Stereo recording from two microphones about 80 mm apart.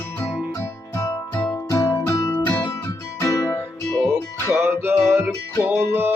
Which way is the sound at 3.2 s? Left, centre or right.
Left.